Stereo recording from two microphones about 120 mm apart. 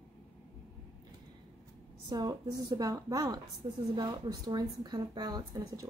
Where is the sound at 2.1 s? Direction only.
35° right (ahead or behind).